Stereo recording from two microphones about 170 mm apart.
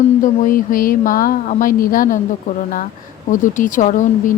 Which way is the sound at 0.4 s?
55° left (ahead or behind).